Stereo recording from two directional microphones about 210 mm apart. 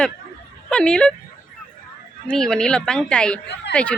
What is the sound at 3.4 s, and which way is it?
Speech, 55° left (ahead or behind).